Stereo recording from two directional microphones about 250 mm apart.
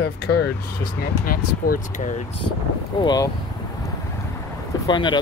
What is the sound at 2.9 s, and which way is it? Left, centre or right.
Speech, centre.